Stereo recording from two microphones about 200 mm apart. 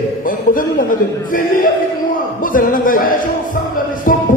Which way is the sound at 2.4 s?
45° left (ahead or behind).